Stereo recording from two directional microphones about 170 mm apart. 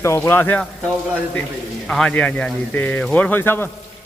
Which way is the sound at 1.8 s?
5° left (ahead or behind).